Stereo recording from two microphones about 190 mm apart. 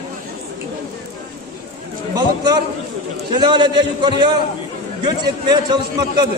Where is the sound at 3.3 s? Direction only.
25° right (ahead or behind).